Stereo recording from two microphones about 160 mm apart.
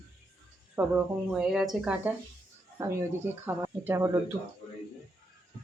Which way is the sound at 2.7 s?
15° right (ahead or behind).